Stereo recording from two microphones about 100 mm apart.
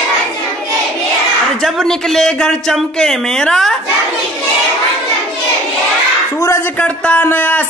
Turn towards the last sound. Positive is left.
turn(degrees=20)  # may be behind; listen again after turning